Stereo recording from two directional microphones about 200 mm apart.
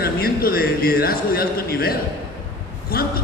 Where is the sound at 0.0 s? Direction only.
50° left (ahead or behind).